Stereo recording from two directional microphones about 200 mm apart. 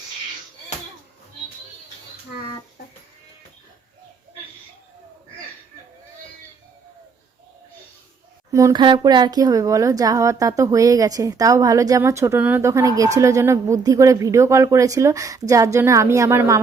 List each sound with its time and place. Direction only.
8.5 s speech: 20° right (ahead or behind)